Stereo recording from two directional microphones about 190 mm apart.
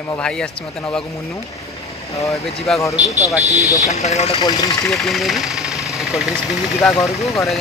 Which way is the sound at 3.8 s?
35° left (ahead or behind).